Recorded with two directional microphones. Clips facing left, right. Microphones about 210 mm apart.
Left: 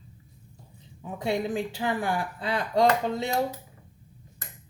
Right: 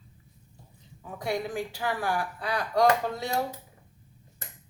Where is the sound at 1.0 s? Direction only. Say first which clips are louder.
Left 3 dB; 25° left (ahead or behind).